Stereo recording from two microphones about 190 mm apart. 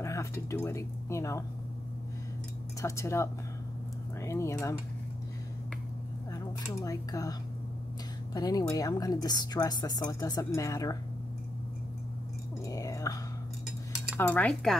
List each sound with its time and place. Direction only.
0.0 s speech: 15° left (ahead or behind)
2.8 s speech: 15° left (ahead or behind)
6.3 s a woman's voice: 20° left (ahead or behind)
12.6 s chewing: 20° left (ahead or behind)
14.1 s cutlery: 5° left (ahead or behind)